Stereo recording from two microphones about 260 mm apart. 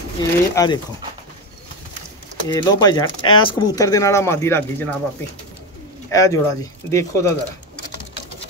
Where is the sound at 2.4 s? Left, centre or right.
Centre.